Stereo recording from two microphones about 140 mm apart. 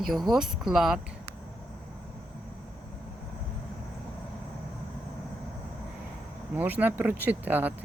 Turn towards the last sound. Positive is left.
turn(degrees=-10)  # may be behind; listen again after turning